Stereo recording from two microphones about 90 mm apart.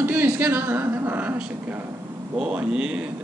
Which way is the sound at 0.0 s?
25° right (ahead or behind).